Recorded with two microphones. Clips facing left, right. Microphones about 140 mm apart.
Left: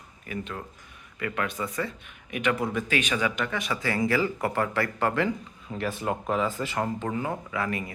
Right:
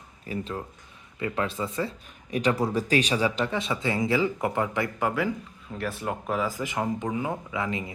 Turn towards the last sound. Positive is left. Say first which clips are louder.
# even
turn(degrees=-20)  # may be behind; listen again after turning